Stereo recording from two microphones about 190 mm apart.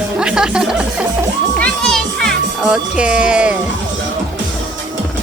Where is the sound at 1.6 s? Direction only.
5° left (ahead or behind).